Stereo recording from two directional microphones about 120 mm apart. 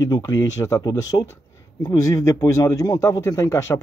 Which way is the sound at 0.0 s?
30° left (ahead or behind).